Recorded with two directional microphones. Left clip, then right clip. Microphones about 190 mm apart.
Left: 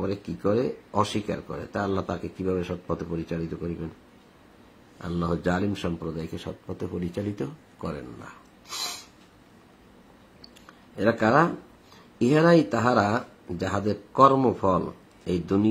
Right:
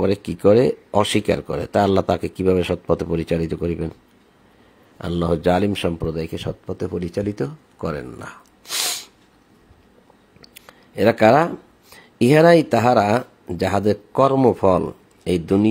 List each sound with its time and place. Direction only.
0.0 s speech: 50° right (ahead or behind)
5.0 s speech: 45° right (ahead or behind)
10.4 s a sound: 45° right (ahead or behind)
12.2 s speech: 50° right (ahead or behind)